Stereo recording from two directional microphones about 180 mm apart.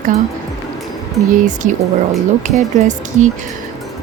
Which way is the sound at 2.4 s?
40° right (ahead or behind).